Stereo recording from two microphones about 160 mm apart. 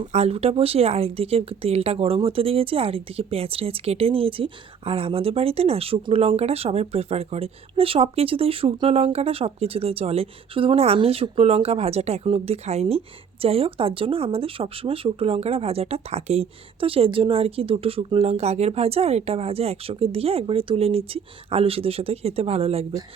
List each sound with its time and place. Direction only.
0.0 s speech: 45° right (ahead or behind)